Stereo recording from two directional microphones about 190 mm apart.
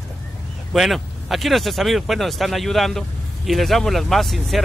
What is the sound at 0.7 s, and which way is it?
Speech, centre (ahead or behind).